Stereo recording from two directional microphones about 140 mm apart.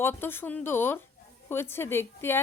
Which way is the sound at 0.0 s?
15° left (ahead or behind).